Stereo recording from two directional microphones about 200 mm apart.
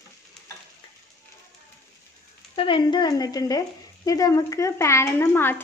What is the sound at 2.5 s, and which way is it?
Speech, 25° left (ahead or behind).